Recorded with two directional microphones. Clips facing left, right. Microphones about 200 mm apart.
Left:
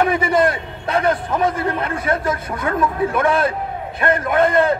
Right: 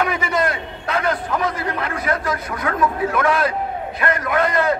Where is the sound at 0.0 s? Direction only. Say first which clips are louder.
Left 4 dB; 30° left (ahead or behind).